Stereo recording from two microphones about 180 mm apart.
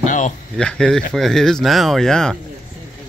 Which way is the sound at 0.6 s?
5° left (ahead or behind).